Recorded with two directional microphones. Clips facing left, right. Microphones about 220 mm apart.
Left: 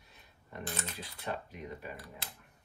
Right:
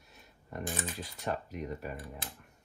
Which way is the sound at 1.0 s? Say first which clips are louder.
Right 3 dB; 45° right (ahead or behind).